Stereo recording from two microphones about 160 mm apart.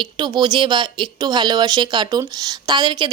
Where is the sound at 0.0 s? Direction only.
30° right (ahead or behind).